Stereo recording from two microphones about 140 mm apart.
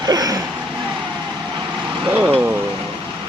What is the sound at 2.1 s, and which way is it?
Speech, 10° right (ahead or behind).